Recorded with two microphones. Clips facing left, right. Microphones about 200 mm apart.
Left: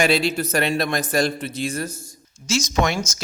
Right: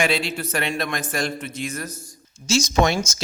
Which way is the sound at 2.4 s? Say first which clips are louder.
Right 2 dB; 30° right (ahead or behind).